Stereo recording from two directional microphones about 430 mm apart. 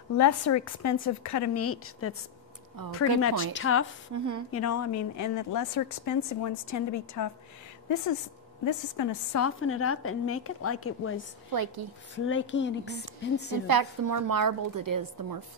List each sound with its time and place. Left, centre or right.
0.2 s a woman's voice: left
4.1 s a woman's voice: right
4.5 s a woman's voice: left
8.6 s a woman's voice: left
11.5 s a woman's voice: right
12.3 s speech: left
13.7 s a woman's voice: right